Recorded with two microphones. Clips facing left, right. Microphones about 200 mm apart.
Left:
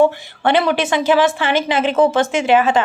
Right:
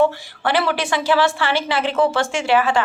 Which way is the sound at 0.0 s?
20° left (ahead or behind).